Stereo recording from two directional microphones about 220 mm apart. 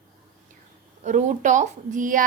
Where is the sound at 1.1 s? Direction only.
35° right (ahead or behind).